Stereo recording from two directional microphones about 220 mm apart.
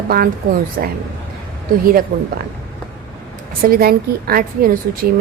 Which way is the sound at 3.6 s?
45° right (ahead or behind).